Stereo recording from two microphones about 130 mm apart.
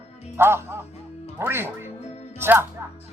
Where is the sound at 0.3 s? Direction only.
20° right (ahead or behind).